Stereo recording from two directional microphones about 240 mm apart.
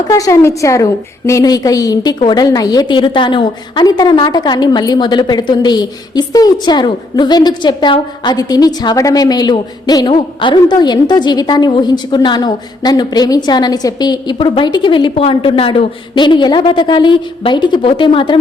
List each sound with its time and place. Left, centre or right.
0.1 s a woman's voice: centre